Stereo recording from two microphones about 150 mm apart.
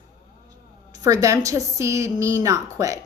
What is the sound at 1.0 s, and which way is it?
Speech, 20° right (ahead or behind).